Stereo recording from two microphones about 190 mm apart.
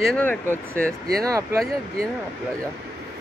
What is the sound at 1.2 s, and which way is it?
Speech, 20° right (ahead or behind).